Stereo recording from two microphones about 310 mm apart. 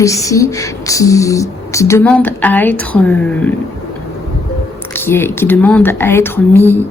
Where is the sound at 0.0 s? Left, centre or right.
Centre.